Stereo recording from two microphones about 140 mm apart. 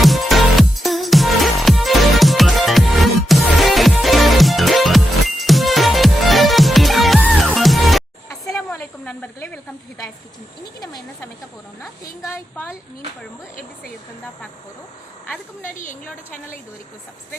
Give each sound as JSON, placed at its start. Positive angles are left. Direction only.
{"t": 0.0, "sound": "music", "side_deg": 0}
{"t": 8.3, "sound": "snake", "side_deg": 20}
{"t": 11.8, "sound": "a sound", "side_deg": 15}